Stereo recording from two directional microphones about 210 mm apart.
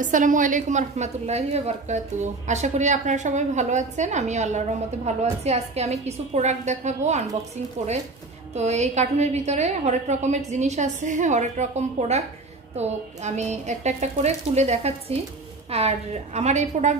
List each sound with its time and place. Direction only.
0.0 s a woman's voice: 40° right (ahead or behind)
8.5 s a woman's voice: 30° right (ahead or behind)